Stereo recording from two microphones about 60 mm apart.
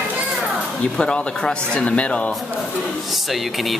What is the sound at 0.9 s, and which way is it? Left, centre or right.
Speech, centre.